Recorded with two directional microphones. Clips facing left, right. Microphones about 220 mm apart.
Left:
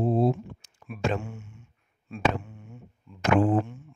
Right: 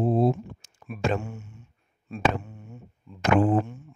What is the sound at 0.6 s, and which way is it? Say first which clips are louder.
Speech: right 1 dB; 45° right (ahead or behind).